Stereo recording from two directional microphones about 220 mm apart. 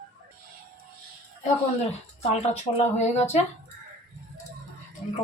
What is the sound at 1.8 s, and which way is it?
Speech, 30° left (ahead or behind).